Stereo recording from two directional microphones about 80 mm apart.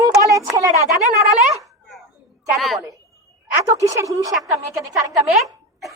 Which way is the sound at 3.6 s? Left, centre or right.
Right.